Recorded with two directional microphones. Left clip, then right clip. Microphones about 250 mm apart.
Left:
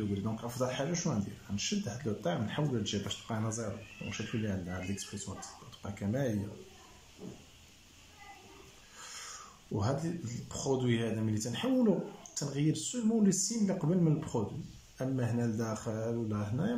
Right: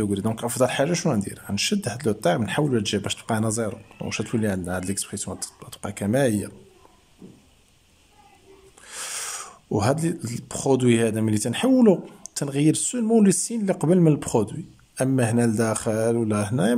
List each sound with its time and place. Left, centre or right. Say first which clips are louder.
0.2 s speech: right 13 dB; right
8.9 s speech: right 14 dB; right